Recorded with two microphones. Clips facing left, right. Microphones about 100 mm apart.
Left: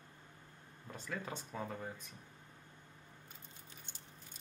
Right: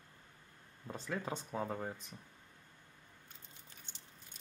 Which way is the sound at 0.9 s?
20° right (ahead or behind).